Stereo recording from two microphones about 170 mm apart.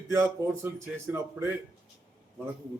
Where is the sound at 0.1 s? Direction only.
15° right (ahead or behind).